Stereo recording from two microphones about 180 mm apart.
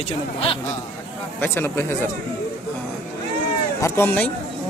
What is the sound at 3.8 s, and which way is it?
Speech, 10° left (ahead or behind).